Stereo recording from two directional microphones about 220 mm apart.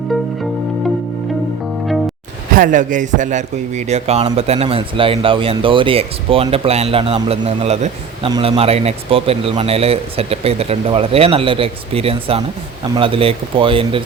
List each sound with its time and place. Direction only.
2.6 s a man's voice: 35° right (ahead or behind)